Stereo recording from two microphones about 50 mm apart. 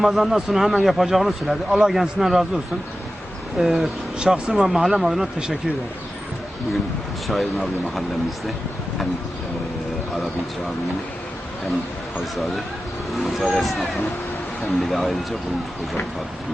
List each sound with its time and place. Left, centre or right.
0.0 s speech: centre
3.6 s speech: centre
4.2 s speech: centre
7.3 s speech: centre
12.2 s speech: centre